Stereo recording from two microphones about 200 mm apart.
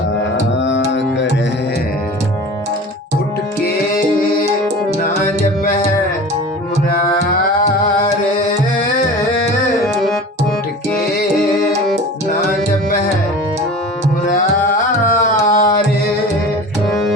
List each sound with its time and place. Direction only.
0.6 s tabla: 65° left (ahead or behind)
6.9 s music: 45° left (ahead or behind)
15.0 s a sound: 45° left (ahead or behind)